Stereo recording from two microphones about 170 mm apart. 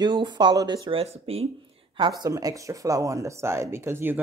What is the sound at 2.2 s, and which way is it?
Speech, 20° right (ahead or behind).